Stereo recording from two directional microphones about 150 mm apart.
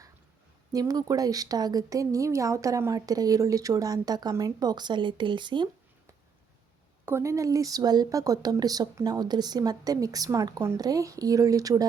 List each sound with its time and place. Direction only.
0.7 s a woman's voice: 25° right (ahead or behind)
7.0 s a woman's voice: 20° right (ahead or behind)